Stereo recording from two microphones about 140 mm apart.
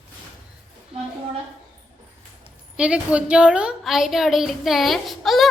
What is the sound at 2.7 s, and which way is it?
A woman's voice, 5° right (ahead or behind).